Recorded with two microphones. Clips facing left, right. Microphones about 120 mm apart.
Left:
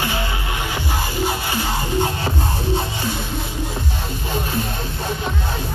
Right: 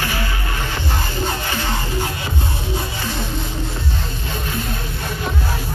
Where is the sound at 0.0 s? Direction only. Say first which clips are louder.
Left 1 dB; 20° left (ahead or behind).